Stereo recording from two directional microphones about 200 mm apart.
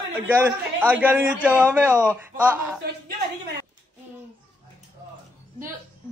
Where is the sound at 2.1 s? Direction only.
10° right (ahead or behind).